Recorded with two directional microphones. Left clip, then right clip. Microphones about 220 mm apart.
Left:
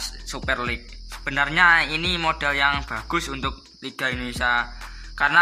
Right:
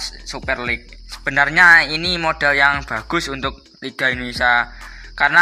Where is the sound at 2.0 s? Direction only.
Centre (ahead or behind).